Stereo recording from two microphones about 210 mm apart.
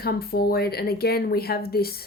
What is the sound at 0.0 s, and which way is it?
A woman's voice, 45° left (ahead or behind).